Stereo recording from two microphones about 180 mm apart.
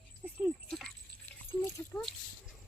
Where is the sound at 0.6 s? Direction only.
5° left (ahead or behind).